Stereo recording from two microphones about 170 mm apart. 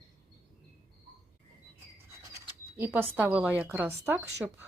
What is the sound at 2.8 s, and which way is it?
A woman's voice, 10° right (ahead or behind).